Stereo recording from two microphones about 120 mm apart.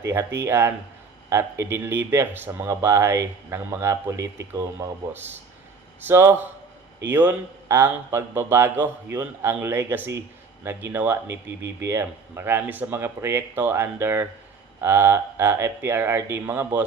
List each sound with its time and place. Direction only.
0.0 s speech: 20° right (ahead or behind)